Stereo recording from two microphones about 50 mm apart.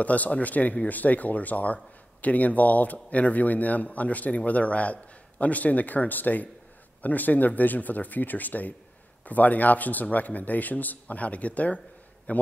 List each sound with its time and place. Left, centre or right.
0.0 s a man's voice: left